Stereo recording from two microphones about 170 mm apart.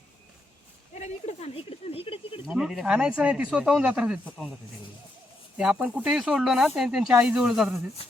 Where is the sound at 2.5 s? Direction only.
5° right (ahead or behind).